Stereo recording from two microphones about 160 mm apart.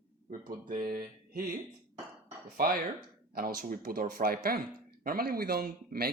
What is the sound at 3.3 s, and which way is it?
Speech, 65° right (ahead or behind).